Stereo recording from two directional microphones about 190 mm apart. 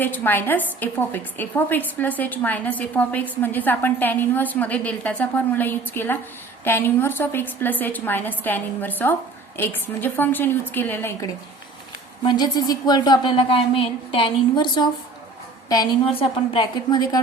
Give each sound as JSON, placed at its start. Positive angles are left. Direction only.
{"t": 0.0, "sound": "a woman's voice", "side_deg": 10}
{"t": 12.2, "sound": "a woman's voice", "side_deg": 25}